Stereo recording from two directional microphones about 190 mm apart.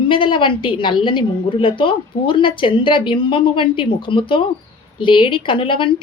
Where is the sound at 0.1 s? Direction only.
25° left (ahead or behind).